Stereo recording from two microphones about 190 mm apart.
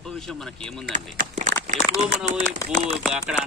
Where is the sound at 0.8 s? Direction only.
45° right (ahead or behind).